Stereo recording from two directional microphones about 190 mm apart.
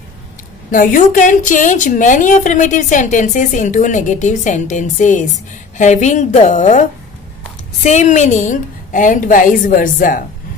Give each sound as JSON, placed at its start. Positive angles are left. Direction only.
{"t": 0.7, "sound": "a woman's voice", "side_deg": 45}